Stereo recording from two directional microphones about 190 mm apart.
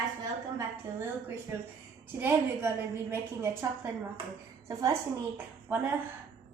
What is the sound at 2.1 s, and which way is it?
A woman's voice, 10° right (ahead or behind).